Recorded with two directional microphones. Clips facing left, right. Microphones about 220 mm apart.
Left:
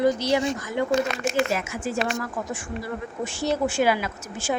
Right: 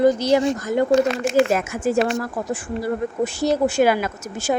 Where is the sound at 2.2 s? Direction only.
35° right (ahead or behind).